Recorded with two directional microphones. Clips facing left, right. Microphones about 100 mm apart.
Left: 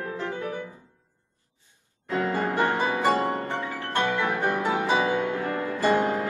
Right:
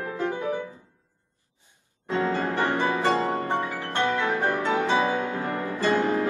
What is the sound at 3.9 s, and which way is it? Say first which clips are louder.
Music: even; 15° left (ahead or behind).